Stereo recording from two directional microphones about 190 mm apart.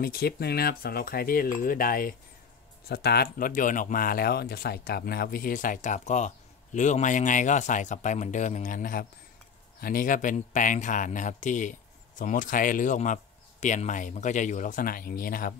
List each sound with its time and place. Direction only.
0.0 s speech: 55° left (ahead or behind)